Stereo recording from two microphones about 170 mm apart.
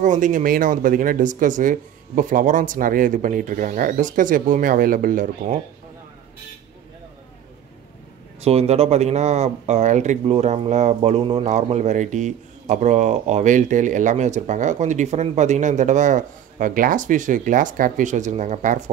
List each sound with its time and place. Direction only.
0.0 s speech: 50° right (ahead or behind)
8.4 s speech: 40° right (ahead or behind)